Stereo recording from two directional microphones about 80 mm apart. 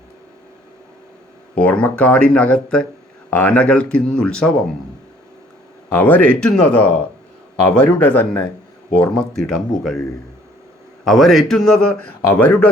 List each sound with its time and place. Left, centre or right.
1.5 s speech: centre
5.9 s speech: left
9.3 s a man's voice: centre
11.0 s a man's voice: centre
12.3 s speech: left